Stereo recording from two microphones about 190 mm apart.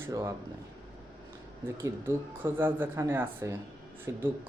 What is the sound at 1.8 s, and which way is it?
Speech, 15° right (ahead or behind).